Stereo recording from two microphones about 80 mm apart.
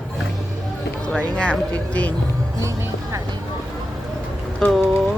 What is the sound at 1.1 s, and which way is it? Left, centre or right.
Speech, centre.